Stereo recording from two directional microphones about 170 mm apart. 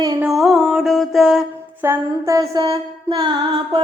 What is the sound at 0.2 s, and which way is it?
Music, centre (ahead or behind).